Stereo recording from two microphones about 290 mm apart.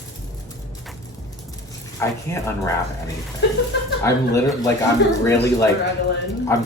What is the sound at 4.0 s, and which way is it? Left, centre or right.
Speech, centre.